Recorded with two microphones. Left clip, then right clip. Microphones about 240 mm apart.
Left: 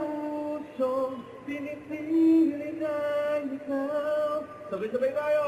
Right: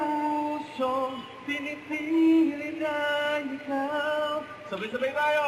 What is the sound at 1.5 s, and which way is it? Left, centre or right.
Music, centre.